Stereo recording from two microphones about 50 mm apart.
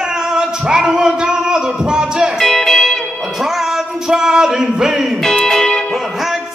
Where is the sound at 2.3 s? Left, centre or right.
Centre.